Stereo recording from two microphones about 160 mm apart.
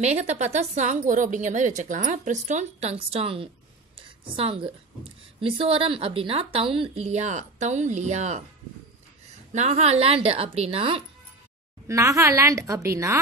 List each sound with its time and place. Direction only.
0.0 s a woman's voice: 45° right (ahead or behind)
5.4 s a woman's voice: 35° right (ahead or behind)
9.5 s a woman's voice: 45° right (ahead or behind)
11.9 s a woman's voice: 20° right (ahead or behind)